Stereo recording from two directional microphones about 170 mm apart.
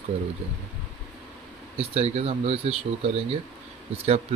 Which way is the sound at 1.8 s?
35° right (ahead or behind).